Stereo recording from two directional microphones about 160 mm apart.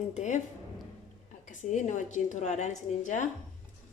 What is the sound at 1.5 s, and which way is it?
A woman's voice, 50° left (ahead or behind).